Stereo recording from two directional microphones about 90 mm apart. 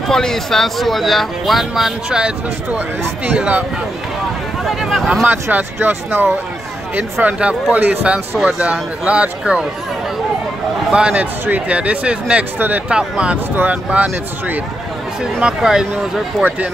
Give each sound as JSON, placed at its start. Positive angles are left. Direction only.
{"t": 0.1, "sound": "speech", "side_deg": 5}
{"t": 4.6, "sound": "speech", "side_deg": 0}
{"t": 5.2, "sound": "speech", "side_deg": -20}
{"t": 10.9, "sound": "speech", "side_deg": -10}